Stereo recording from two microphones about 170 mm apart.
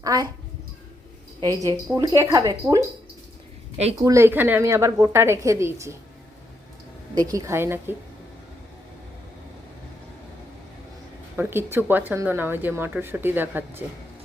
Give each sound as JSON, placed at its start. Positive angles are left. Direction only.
{"t": 0.0, "sound": "speech", "side_deg": -20}
{"t": 1.4, "sound": "speech", "side_deg": -20}
{"t": 3.9, "sound": "a woman's voice", "side_deg": -20}
{"t": 7.2, "sound": "a woman's voice", "side_deg": -20}
{"t": 11.3, "sound": "a woman's voice", "side_deg": -15}